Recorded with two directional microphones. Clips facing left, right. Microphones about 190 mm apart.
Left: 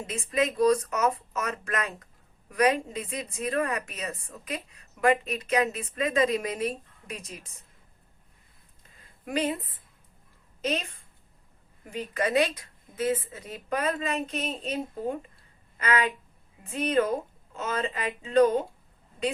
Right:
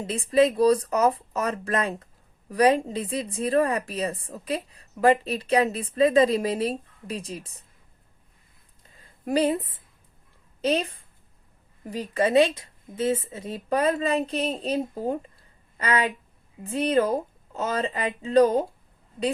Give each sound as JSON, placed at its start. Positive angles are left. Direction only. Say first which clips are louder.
{"t": 0.1, "sound": "a woman's voice", "louder": "right 8 dB", "side_deg": -30}
{"t": 9.0, "sound": "a sound", "louder": "right 6 dB", "side_deg": -35}
{"t": 10.6, "sound": "a woman's voice", "louder": "right 6 dB", "side_deg": -35}